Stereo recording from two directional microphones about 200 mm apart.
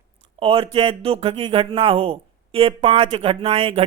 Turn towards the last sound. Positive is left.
turn(degrees=-25)  # may be behind; listen again after turning